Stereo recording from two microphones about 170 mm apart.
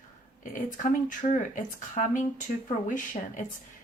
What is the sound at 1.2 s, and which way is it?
A woman's voice, 45° left (ahead or behind).